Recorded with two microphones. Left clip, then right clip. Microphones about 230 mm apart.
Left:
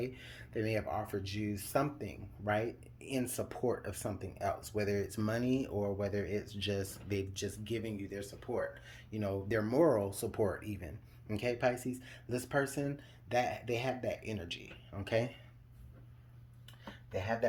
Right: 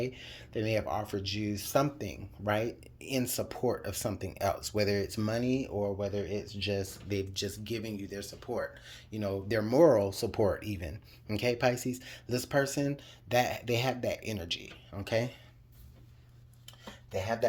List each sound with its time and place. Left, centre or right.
0.0 s speech: centre
17.1 s chopping: right